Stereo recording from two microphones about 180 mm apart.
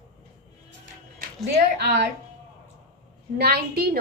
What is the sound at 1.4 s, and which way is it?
Speech, 65° right (ahead or behind).